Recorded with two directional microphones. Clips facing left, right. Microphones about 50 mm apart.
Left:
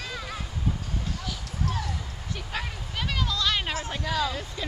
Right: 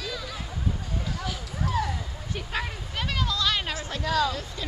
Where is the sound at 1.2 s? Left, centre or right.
Centre.